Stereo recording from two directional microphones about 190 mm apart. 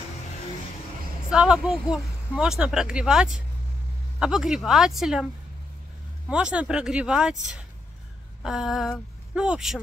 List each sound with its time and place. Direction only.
1.3 s speech: 5° right (ahead or behind)
6.2 s speech: 5° right (ahead or behind)
8.4 s speech: centre (ahead or behind)